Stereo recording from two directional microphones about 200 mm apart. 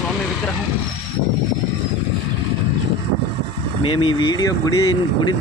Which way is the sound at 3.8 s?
25° left (ahead or behind).